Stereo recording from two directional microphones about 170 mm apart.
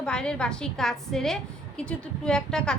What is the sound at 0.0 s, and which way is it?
A woman's voice, 5° left (ahead or behind).